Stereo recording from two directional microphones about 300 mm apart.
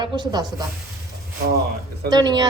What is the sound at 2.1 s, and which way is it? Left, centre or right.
Speech, centre.